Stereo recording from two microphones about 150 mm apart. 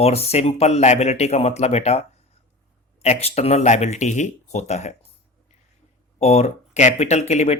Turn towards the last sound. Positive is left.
turn(degrees=45)  # may be behind; listen again after turning